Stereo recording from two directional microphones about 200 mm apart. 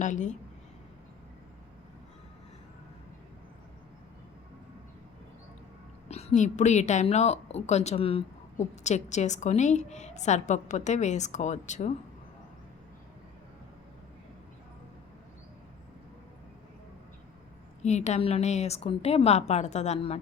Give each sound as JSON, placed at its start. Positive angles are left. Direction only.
{"t": 0.0, "sound": "a woman's voice", "side_deg": 40}
{"t": 6.1, "sound": "a woman's voice", "side_deg": 30}
{"t": 17.8, "sound": "a woman's voice", "side_deg": 35}